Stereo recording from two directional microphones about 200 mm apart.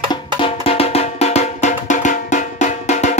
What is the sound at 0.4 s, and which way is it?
Music, 30° left (ahead or behind).